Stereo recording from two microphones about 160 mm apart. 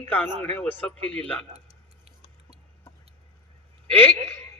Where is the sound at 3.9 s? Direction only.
10° left (ahead or behind).